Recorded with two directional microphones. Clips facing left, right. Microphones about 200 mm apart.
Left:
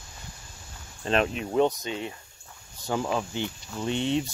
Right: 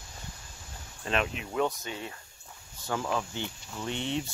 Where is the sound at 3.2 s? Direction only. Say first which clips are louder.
Left 4 dB; 20° left (ahead or behind).